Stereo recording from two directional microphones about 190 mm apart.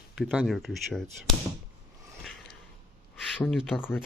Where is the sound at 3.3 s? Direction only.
Centre (ahead or behind).